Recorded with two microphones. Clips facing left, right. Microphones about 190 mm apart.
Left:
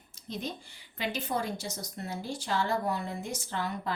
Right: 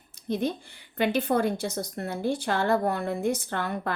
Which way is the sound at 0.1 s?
60° right (ahead or behind).